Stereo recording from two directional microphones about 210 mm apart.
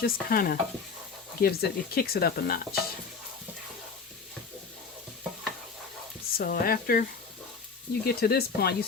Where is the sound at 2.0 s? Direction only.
45° left (ahead or behind).